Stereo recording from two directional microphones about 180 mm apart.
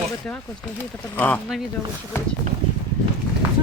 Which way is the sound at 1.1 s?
10° left (ahead or behind).